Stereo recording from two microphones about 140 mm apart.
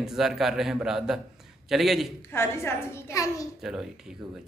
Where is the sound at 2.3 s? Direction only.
20° left (ahead or behind).